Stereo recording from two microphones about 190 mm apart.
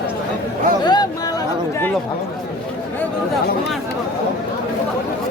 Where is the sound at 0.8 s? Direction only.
20° left (ahead or behind).